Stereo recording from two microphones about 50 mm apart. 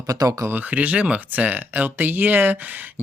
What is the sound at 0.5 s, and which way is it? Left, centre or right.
Speech, right.